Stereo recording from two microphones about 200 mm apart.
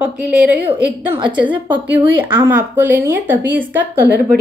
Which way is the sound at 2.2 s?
10° right (ahead or behind).